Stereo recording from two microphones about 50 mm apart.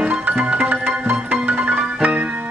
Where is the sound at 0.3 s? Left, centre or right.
Right.